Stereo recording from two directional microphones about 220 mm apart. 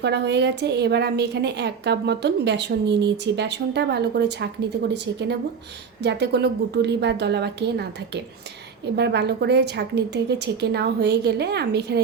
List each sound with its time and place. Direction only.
0.0 s a woman's voice: 50° right (ahead or behind)
6.0 s a woman's voice: 50° right (ahead or behind)